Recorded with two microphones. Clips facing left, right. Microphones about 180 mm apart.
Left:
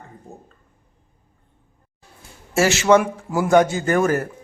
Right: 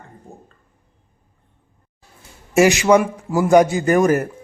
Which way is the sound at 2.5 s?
15° right (ahead or behind).